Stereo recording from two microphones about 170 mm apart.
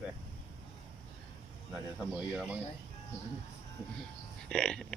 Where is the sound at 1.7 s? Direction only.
Centre (ahead or behind).